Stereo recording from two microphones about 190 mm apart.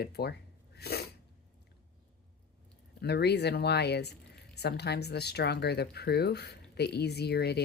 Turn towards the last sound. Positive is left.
turn(degrees=60)  # may be behind; listen again after turning